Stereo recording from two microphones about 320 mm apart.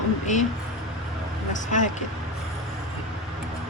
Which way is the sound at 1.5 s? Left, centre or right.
Left.